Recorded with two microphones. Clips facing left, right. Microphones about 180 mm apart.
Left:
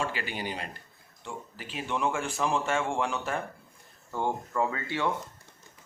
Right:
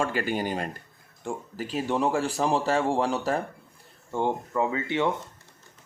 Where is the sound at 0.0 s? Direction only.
45° right (ahead or behind).